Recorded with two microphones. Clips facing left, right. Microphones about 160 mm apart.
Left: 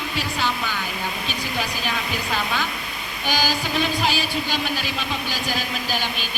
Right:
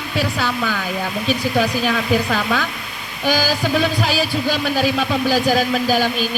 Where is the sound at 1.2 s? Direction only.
45° right (ahead or behind).